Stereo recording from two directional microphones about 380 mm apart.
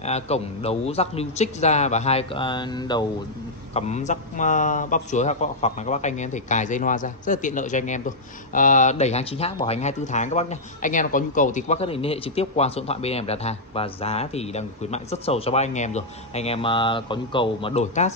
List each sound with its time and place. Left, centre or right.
0.0 s a man's voice: centre